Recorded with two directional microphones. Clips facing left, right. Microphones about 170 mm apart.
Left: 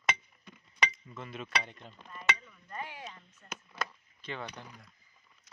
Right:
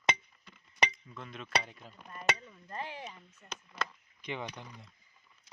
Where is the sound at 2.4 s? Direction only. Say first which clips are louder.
Right 1 dB; 30° right (ahead or behind).